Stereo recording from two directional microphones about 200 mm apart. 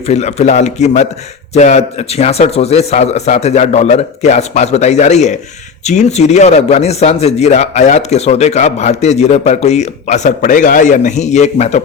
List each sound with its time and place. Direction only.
0.1 s speech: 35° left (ahead or behind)